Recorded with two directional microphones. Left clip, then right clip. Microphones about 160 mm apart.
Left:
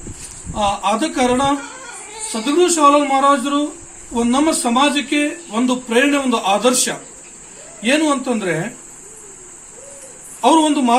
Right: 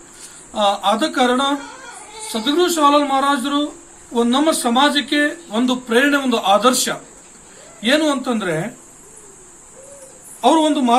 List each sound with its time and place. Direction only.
0.5 s speech: centre (ahead or behind)
10.4 s speech: centre (ahead or behind)